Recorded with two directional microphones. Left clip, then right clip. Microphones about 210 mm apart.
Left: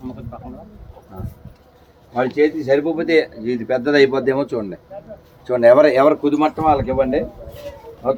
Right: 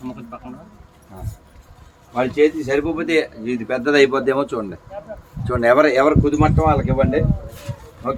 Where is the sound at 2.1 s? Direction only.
Centre (ahead or behind); by 7.0 s 30° left (ahead or behind).